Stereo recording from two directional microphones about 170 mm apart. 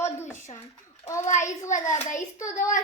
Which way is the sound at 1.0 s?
15° left (ahead or behind).